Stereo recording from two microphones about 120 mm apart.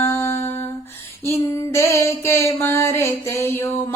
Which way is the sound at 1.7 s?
25° left (ahead or behind).